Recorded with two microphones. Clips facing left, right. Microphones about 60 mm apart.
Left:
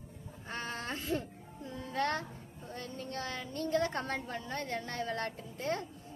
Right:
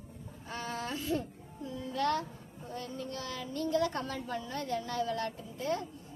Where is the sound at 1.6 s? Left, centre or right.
Left.